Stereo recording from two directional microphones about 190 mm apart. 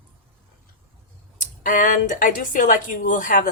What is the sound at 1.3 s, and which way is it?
A woman's voice, 45° left (ahead or behind).